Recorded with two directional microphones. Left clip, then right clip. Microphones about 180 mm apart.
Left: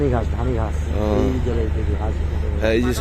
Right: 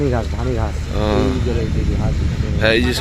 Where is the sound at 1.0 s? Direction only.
Centre (ahead or behind).